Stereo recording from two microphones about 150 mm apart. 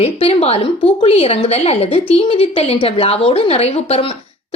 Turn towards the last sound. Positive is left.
turn(degrees=40)  # may be behind; listen again after turning